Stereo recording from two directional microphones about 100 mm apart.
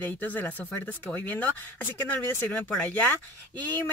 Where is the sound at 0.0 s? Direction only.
15° left (ahead or behind).